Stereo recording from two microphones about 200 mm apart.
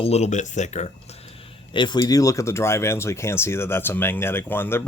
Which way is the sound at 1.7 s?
25° left (ahead or behind).